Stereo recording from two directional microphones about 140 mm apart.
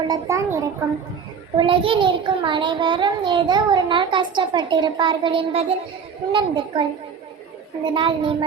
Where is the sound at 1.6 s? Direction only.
40° right (ahead or behind).